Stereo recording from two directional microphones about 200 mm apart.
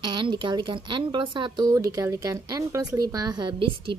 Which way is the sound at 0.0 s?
25° right (ahead or behind).